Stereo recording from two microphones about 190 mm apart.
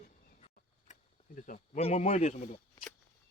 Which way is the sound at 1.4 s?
45° left (ahead or behind).